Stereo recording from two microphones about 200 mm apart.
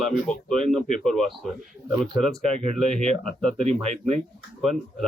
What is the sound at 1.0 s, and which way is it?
Speech, centre (ahead or behind).